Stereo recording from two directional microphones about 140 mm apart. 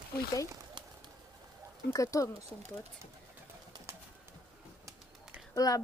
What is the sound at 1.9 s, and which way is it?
Speech, 25° left (ahead or behind).